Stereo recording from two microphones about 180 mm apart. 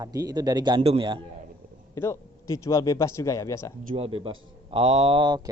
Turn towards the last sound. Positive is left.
turn(degrees=-25)  # may be behind; listen again after turning